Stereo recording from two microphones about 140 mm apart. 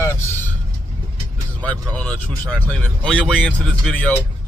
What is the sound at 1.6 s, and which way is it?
Speech, 10° left (ahead or behind).